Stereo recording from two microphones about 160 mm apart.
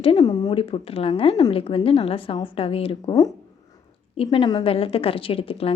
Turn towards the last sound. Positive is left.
turn(degrees=35)  # may be behind; listen again after turning